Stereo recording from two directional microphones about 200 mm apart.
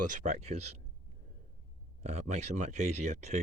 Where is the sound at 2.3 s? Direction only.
35° right (ahead or behind).